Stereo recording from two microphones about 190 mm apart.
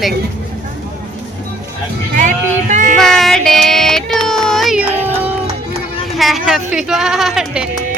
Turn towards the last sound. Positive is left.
turn(degrees=0)  # may be behind; listen again after turning